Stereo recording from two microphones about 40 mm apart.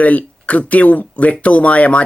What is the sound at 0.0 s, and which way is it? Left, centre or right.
Speech, left.